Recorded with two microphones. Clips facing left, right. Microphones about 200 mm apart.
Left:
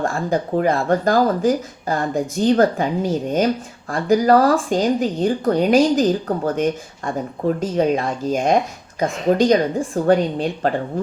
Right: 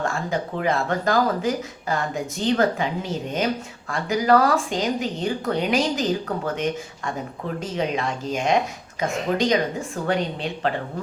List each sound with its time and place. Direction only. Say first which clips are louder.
0.0 s speech: left 5 dB; 35° left (ahead or behind)
2.3 s speech: left 5 dB; 45° left (ahead or behind)